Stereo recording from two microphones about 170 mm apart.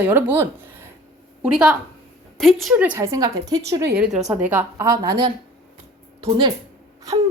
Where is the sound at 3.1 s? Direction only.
20° right (ahead or behind).